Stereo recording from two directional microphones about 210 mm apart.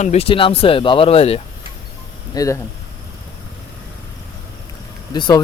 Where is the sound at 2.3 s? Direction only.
15° left (ahead or behind).